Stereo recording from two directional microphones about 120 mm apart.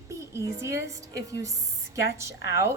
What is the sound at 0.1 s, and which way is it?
A woman's voice, 25° right (ahead or behind).